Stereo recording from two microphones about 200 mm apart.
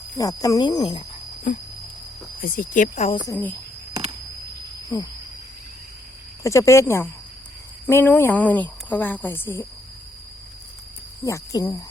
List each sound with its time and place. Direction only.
0.2 s speech: 15° left (ahead or behind)
2.4 s speech: 40° left (ahead or behind)
3.2 s a woman's voice: 10° left (ahead or behind)
6.4 s a woman's voice: 15° left (ahead or behind)
11.2 s a woman's voice: 15° left (ahead or behind)